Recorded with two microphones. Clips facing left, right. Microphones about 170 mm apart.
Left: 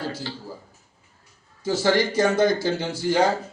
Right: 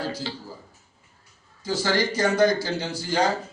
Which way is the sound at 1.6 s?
25° left (ahead or behind).